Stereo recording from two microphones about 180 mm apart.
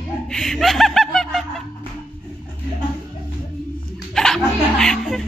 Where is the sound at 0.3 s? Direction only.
Centre (ahead or behind).